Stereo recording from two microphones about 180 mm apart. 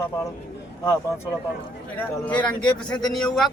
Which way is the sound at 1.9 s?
5° left (ahead or behind).